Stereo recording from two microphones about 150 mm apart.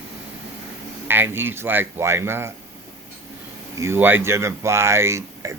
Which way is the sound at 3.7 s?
15° right (ahead or behind).